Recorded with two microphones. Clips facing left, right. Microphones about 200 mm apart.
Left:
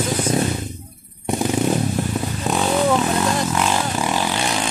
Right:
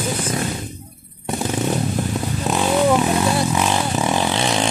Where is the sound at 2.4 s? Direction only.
Centre (ahead or behind).